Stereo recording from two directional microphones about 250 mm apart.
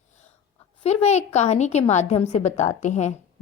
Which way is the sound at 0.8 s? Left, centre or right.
Left.